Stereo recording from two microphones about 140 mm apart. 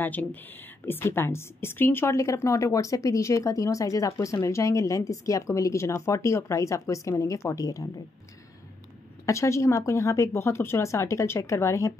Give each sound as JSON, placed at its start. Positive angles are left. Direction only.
{"t": 0.0, "sound": "a woman's voice", "side_deg": 15}
{"t": 9.2, "sound": "a woman's voice", "side_deg": 20}